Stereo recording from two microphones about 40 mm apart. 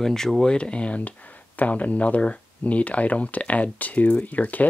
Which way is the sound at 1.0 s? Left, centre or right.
Left.